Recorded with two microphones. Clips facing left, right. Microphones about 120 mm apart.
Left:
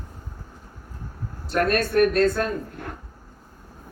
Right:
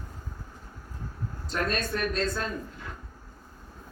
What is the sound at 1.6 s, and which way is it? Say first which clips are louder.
Speech: left 10 dB; 60° left (ahead or behind).